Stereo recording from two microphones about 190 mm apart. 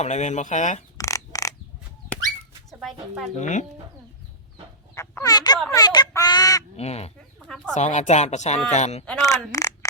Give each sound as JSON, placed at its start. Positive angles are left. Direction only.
{"t": 0.0, "sound": "speech", "side_deg": 40}
{"t": 0.9, "sound": "a sound", "side_deg": 15}
{"t": 2.6, "sound": "speech", "side_deg": 0}
{"t": 3.3, "sound": "speech", "side_deg": 40}
{"t": 4.9, "sound": "chicken", "side_deg": 15}
{"t": 5.7, "sound": "speech", "side_deg": 20}
{"t": 6.7, "sound": "speech", "side_deg": 35}
{"t": 7.3, "sound": "chicken", "side_deg": 5}
{"t": 7.7, "sound": "speech", "side_deg": 40}
{"t": 9.2, "sound": "speech", "side_deg": 15}